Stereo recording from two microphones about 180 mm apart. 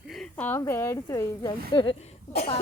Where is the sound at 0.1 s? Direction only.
5° left (ahead or behind).